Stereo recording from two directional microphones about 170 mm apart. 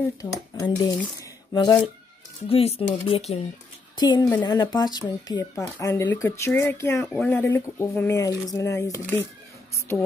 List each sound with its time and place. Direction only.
0.2 s speech: 20° left (ahead or behind); by 3.3 s 40° left (ahead or behind)
3.9 s a woman's voice: 25° left (ahead or behind)